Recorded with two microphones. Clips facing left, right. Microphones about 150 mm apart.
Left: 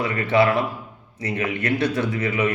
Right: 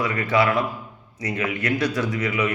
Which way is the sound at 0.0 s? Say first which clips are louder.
Left 2 dB; 30° left (ahead or behind).